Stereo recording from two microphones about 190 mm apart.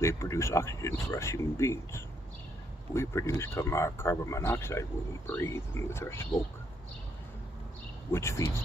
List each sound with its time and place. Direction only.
0.0 s speech: 15° left (ahead or behind)
8.1 s speech: 15° left (ahead or behind)